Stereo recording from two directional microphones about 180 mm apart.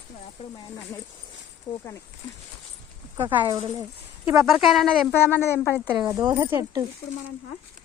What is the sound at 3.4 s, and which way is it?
Speech, 25° right (ahead or behind).